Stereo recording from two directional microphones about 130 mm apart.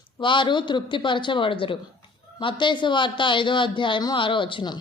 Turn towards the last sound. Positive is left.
turn(degrees=40)  # may be behind; listen again after turning